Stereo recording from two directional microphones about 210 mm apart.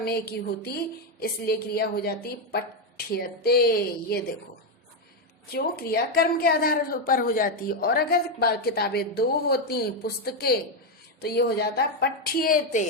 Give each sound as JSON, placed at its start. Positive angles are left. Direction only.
{"t": 0.0, "sound": "a woman's voice", "side_deg": 50}
{"t": 5.5, "sound": "a woman's voice", "side_deg": 45}